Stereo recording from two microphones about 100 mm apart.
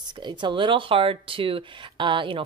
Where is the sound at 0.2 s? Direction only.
50° right (ahead or behind).